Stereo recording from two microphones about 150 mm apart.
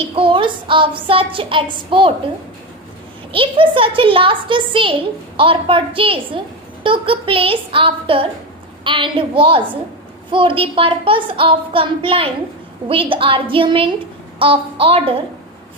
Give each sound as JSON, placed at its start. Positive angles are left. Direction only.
{"t": 0.2, "sound": "child singing", "side_deg": -35}
{"t": 3.3, "sound": "speech", "side_deg": -35}